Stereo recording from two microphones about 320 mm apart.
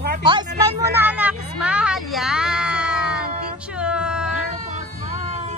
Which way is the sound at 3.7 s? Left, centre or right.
Centre.